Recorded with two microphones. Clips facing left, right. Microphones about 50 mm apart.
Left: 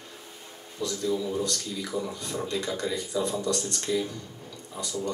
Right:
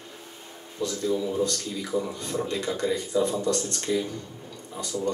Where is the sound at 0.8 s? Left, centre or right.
Right.